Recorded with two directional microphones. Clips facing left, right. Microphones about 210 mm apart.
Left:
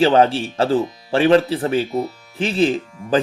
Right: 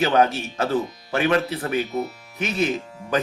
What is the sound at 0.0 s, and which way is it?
Speech, 30° left (ahead or behind).